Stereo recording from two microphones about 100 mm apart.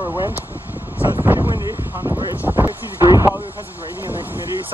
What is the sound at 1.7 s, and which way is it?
Speech, 20° right (ahead or behind).